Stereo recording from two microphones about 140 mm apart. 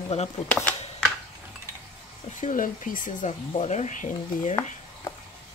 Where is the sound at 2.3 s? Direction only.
70° left (ahead or behind).